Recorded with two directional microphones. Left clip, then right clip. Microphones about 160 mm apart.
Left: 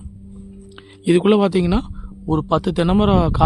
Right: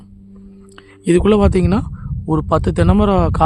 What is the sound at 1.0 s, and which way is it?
Speech, 5° right (ahead or behind).